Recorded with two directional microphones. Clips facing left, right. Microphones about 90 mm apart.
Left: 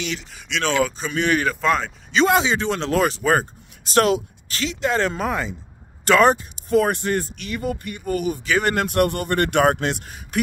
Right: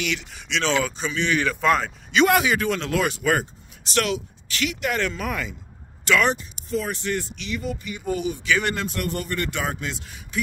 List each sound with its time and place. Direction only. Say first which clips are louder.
0.2 s speech: left 1 dB; centre (ahead or behind)
1.0 s speech: left 3 dB; 45° left (ahead or behind)
1.6 s speech: even; centre (ahead or behind)
2.1 s speech: left 1 dB; 25° left (ahead or behind); by 4.6 s 40° left (ahead or behind)
4.6 s speech: left 4 dB; 25° left (ahead or behind)
6.0 s speech: left 6 dB; 40° left (ahead or behind)
6.7 s speech: left 7 dB; 55° left (ahead or behind)
8.7 s speech: left 8 dB; 60° left (ahead or behind)